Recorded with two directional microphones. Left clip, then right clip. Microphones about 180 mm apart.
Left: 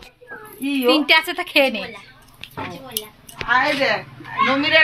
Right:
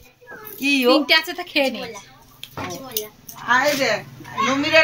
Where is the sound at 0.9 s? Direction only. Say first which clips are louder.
Left 2 dB; 10° left (ahead or behind).